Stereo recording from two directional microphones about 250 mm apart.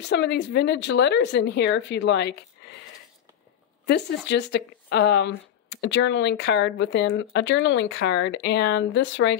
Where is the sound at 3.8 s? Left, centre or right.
Left.